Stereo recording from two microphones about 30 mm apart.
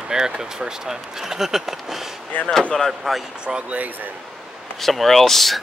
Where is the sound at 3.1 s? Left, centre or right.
Centre.